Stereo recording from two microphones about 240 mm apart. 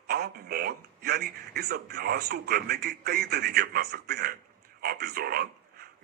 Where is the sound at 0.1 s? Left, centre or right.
Right.